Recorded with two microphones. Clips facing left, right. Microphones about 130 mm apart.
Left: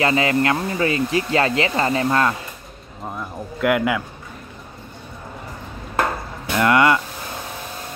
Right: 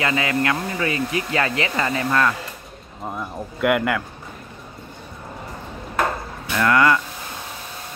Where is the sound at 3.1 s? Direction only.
Centre (ahead or behind).